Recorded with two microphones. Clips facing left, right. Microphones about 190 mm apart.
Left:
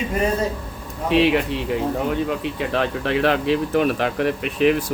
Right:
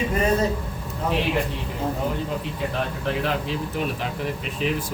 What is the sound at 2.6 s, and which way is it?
Speech, 75° left (ahead or behind).